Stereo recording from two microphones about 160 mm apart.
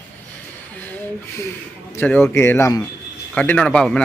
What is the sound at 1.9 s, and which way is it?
Speech, 10° left (ahead or behind).